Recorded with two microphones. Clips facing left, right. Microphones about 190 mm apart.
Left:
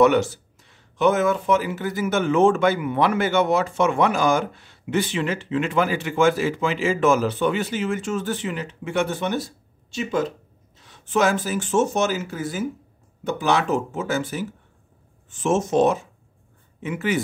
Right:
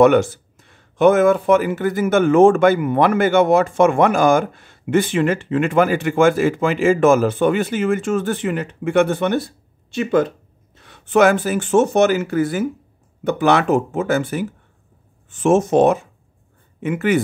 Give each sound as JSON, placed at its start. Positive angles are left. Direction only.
{"t": 0.0, "sound": "speech", "side_deg": -50}